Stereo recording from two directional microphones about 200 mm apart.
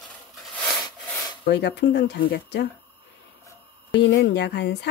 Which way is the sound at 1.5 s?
60° left (ahead or behind).